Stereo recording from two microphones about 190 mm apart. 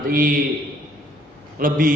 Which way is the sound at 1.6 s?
45° right (ahead or behind).